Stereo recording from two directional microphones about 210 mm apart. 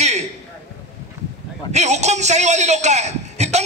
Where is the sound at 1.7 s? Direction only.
30° right (ahead or behind).